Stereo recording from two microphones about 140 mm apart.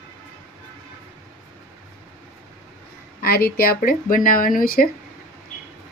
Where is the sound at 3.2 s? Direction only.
90° left.